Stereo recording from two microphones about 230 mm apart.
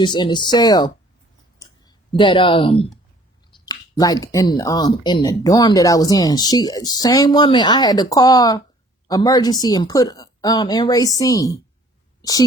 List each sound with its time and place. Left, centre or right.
0.0 s speech: centre
1.5 s clicking: centre
3.7 s speech: centre